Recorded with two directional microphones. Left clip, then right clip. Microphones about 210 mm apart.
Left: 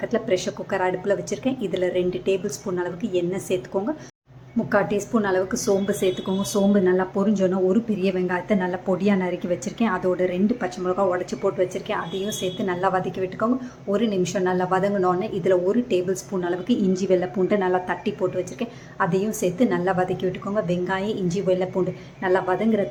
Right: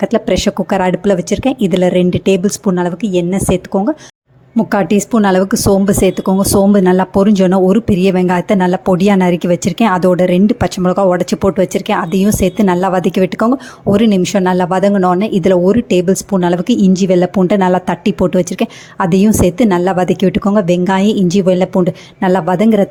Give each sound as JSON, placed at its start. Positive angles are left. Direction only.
{"t": 0.0, "sound": "speech", "side_deg": -45}